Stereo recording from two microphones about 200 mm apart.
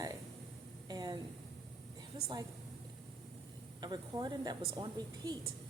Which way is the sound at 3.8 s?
20° right (ahead or behind).